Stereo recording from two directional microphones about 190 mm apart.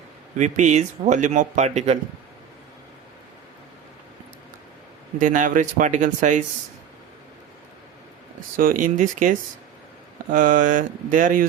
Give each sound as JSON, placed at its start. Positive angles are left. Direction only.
{"t": 0.3, "sound": "a man's voice", "side_deg": -40}
{"t": 5.2, "sound": "a man's voice", "side_deg": -45}
{"t": 8.5, "sound": "speech", "side_deg": -45}